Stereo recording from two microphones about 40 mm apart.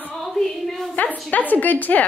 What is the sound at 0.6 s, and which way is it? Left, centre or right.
Speech, centre.